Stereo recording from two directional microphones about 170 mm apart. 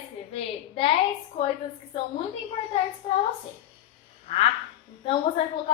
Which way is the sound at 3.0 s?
25° left (ahead or behind).